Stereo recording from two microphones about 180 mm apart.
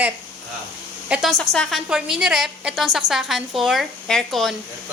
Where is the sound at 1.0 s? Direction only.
5° right (ahead or behind).